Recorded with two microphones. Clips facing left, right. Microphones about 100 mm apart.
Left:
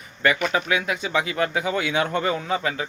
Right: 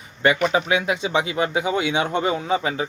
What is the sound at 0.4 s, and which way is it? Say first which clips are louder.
Speech: right 3 dB; 25° right (ahead or behind).